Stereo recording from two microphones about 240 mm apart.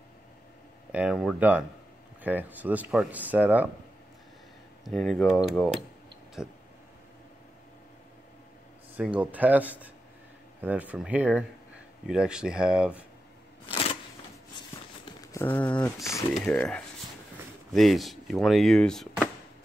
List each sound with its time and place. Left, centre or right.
0.9 s speech: centre
4.8 s speech: centre
8.9 s speech: centre
13.7 s a sound: left
15.3 s speech: centre